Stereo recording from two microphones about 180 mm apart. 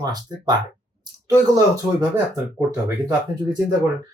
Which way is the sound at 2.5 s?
20° right (ahead or behind).